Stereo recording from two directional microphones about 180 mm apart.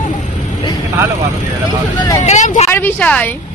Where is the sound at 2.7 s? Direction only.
10° left (ahead or behind).